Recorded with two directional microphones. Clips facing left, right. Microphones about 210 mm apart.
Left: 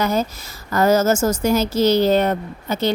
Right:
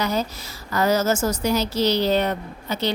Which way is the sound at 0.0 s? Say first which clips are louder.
Left 4 dB; 50° left (ahead or behind).